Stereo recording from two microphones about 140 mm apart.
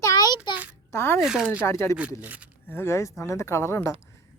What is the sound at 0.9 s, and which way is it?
Speech, 15° left (ahead or behind).